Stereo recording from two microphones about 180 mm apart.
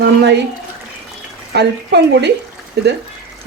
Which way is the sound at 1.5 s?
65° right (ahead or behind).